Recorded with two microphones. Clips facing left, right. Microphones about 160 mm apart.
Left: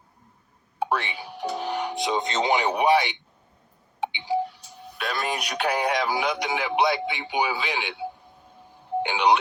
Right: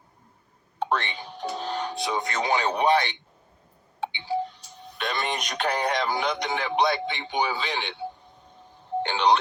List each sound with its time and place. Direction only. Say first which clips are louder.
0.8 s speech: left 1 dB; 10° left (ahead or behind)
6.6 s speech: left 1 dB; 15° left (ahead or behind)